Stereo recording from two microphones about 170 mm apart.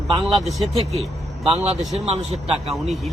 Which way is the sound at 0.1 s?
30° right (ahead or behind).